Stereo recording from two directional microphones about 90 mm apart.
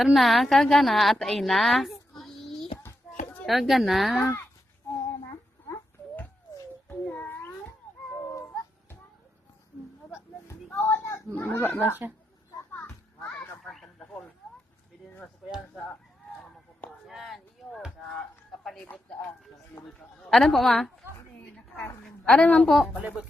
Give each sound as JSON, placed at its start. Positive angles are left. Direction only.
{"t": 0.0, "sound": "a woman's voice", "side_deg": 0}
{"t": 3.4, "sound": "a woman's voice", "side_deg": 0}
{"t": 6.8, "sound": "child singing", "side_deg": 20}
{"t": 8.2, "sound": "a sound", "side_deg": 30}
{"t": 10.5, "sound": "a sound", "side_deg": 30}
{"t": 11.3, "sound": "speech", "side_deg": 25}
{"t": 12.7, "sound": "children playing", "side_deg": 20}
{"t": 13.7, "sound": "radio", "side_deg": 5}
{"t": 17.1, "sound": "a sound", "side_deg": 0}
{"t": 19.9, "sound": "a woman's voice", "side_deg": 5}
{"t": 22.0, "sound": "a sound", "side_deg": 5}
{"t": 22.6, "sound": "a woman's voice", "side_deg": 0}